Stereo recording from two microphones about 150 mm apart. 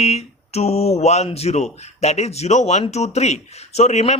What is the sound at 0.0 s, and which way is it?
Speech, 45° left (ahead or behind).